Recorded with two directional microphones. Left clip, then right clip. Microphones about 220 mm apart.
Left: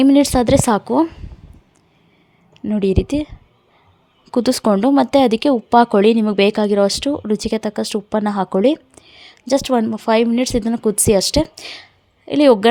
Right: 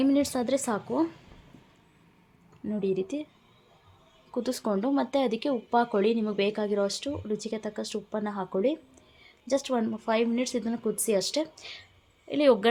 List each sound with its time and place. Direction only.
0.0 s speech: 40° left (ahead or behind)
2.6 s speech: 40° left (ahead or behind)
4.3 s speech: 40° left (ahead or behind)